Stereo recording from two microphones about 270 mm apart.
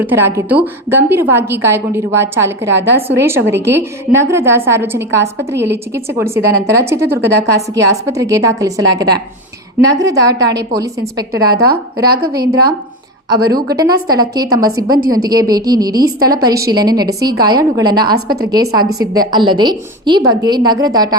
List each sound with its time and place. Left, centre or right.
0.0 s a woman's voice: centre
12.0 s a woman's voice: right
13.3 s a woman's voice: centre